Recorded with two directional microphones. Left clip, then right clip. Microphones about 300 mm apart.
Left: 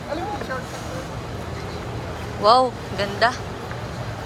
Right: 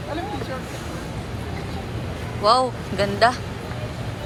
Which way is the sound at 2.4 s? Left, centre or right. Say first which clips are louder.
Left 2 dB; centre.